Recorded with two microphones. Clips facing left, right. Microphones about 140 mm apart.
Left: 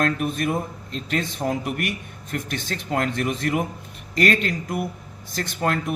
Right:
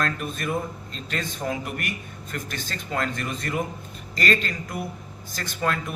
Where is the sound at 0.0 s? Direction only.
55° left (ahead or behind).